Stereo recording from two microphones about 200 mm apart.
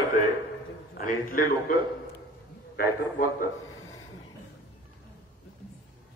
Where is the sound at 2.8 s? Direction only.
50° left (ahead or behind).